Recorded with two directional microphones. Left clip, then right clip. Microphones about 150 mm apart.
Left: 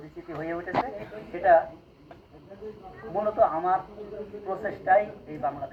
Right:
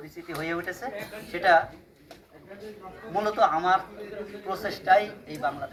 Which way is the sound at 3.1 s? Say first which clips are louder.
Even; 25° left (ahead or behind).